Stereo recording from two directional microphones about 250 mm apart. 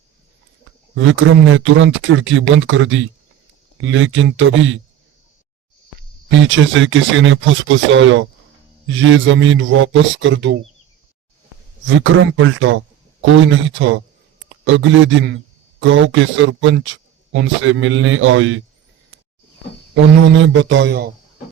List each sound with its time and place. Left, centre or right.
0.9 s speech: right
6.3 s speech: right
11.9 s speech: right
20.2 s speech: right